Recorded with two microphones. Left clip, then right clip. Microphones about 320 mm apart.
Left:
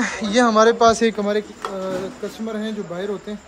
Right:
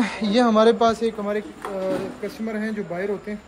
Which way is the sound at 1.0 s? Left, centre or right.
Left.